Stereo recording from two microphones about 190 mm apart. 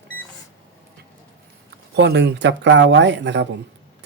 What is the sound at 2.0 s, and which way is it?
Speech, 65° right (ahead or behind).